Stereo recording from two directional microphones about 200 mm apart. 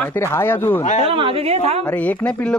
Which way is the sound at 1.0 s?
25° right (ahead or behind).